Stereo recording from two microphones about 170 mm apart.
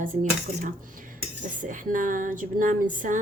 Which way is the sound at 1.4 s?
50° right (ahead or behind).